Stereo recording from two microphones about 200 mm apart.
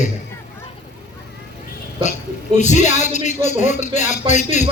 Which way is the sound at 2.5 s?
35° left (ahead or behind).